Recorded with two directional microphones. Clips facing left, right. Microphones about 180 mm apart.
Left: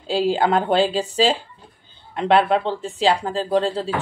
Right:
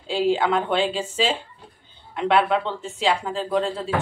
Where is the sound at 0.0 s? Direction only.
35° left (ahead or behind).